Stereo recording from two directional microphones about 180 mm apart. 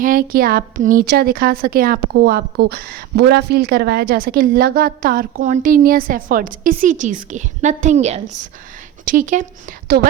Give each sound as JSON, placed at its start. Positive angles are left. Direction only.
{"t": 0.0, "sound": "a woman's voice", "side_deg": -50}